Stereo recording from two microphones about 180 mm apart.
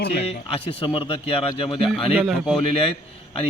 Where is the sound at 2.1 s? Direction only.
5° right (ahead or behind).